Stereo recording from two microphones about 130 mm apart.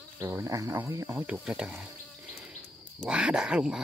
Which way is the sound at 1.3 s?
5° right (ahead or behind).